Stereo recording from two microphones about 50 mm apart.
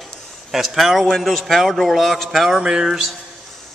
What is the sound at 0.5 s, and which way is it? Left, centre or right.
A man's voice, centre.